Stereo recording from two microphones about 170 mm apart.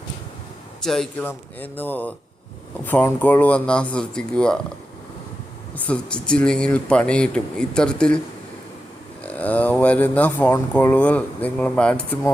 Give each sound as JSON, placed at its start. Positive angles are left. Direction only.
{"t": 0.8, "sound": "speech", "side_deg": 5}
{"t": 5.7, "sound": "speech", "side_deg": 10}
{"t": 9.2, "sound": "speech", "side_deg": 10}